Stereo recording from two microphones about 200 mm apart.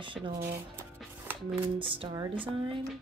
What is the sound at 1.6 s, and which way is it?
Speech, 25° right (ahead or behind).